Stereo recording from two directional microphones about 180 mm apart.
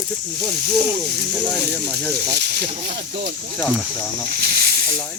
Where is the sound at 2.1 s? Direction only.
65° right (ahead or behind).